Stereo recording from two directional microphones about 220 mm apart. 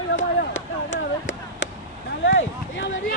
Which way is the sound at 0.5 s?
60° left (ahead or behind).